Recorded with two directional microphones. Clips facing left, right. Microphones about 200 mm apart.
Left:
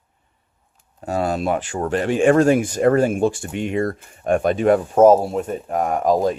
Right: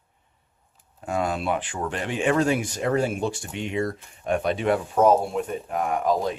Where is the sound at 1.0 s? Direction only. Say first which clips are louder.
Left 4 dB; 35° left (ahead or behind).